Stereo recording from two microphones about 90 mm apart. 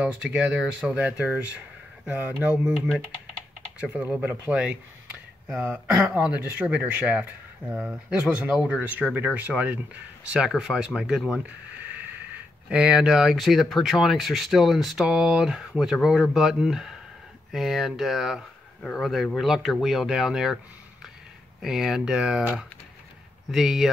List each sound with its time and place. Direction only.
0.0 s speech: 15° right (ahead or behind)
3.8 s speech: 15° right (ahead or behind)
11.4 s a sound: 15° right (ahead or behind)
12.6 s speech: 10° right (ahead or behind)
21.5 s speech: 5° right (ahead or behind)